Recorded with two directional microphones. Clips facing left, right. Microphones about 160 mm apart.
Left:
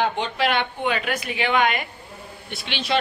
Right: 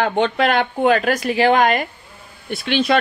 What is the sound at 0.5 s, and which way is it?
Speech, 40° right (ahead or behind).